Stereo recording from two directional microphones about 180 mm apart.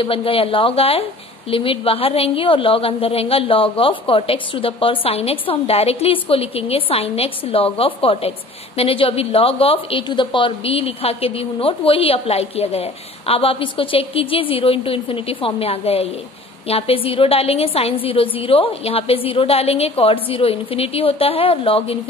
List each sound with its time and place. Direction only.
0.0 s a woman's voice: 30° left (ahead or behind)